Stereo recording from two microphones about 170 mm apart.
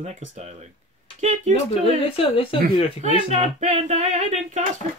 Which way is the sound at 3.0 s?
40° right (ahead or behind).